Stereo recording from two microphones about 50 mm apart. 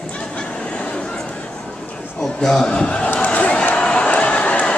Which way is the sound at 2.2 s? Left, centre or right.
Centre.